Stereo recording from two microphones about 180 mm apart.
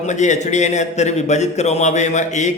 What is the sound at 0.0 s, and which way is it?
A man's voice, 40° left (ahead or behind).